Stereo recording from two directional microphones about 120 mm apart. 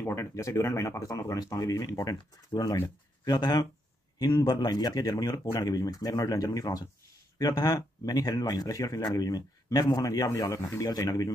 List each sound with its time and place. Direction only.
0.0 s speech: 20° left (ahead or behind)